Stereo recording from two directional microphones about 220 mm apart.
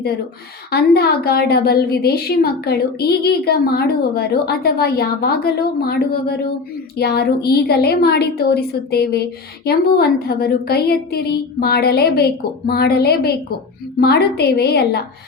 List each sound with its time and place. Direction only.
0.7 s a woman's voice: 45° left (ahead or behind)